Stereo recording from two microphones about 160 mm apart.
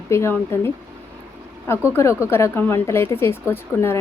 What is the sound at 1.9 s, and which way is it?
A woman's voice, 15° left (ahead or behind).